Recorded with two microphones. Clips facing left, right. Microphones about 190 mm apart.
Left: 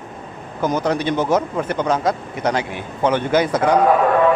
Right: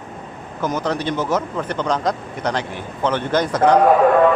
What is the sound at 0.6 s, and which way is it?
Speech, 10° left (ahead or behind).